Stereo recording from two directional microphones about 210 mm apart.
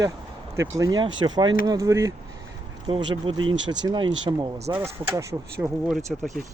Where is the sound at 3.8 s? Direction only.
20° right (ahead or behind).